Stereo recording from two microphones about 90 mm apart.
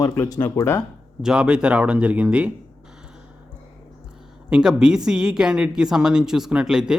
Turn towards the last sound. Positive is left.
turn(degrees=-5)  # may be behind; listen again after turning